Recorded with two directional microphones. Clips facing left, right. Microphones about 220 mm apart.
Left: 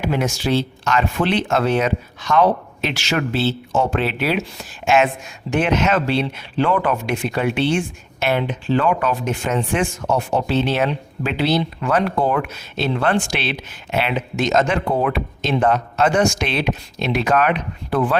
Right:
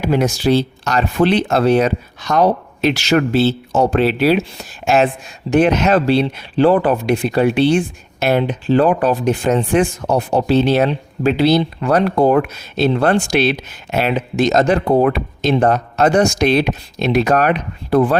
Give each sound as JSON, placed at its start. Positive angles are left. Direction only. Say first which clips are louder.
{"t": 0.0, "sound": "speech", "louder": "right 5 dB", "side_deg": -35}